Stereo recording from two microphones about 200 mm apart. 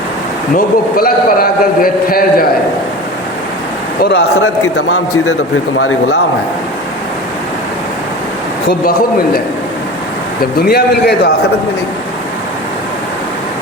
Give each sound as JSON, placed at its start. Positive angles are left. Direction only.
{"t": 0.5, "sound": "a man's voice", "side_deg": 45}
{"t": 4.1, "sound": "a man's voice", "side_deg": 55}
{"t": 5.7, "sound": "speech", "side_deg": 90}
{"t": 8.8, "sound": "a man's voice", "side_deg": 50}
{"t": 10.7, "sound": "a man's voice", "side_deg": 50}